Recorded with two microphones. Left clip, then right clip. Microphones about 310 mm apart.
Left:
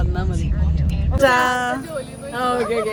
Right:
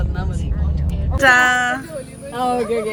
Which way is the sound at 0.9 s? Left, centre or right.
Centre.